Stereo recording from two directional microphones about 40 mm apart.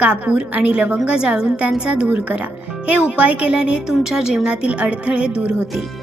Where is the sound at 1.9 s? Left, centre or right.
Right; by 4.5 s centre.